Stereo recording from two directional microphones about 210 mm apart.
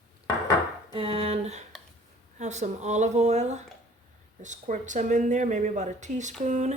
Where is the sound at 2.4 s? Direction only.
35° right (ahead or behind).